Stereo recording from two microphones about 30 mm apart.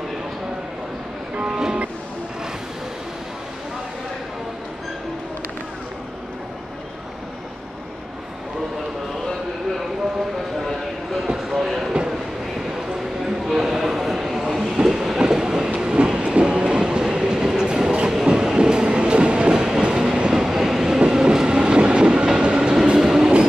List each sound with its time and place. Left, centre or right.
1.5 s music: right
11.5 s a sound: centre
13.5 s a sound: centre
14.6 s train: right
14.9 s train: centre
15.2 s train: right
19.5 s train: right
19.8 s train: right
20.3 s train: centre; by 22.8 s right
22.9 s train: centre